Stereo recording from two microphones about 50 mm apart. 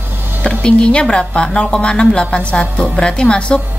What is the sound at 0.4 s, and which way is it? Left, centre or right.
A woman's voice, centre.